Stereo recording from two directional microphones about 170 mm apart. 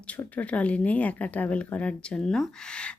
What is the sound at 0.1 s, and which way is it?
Speech, 10° left (ahead or behind).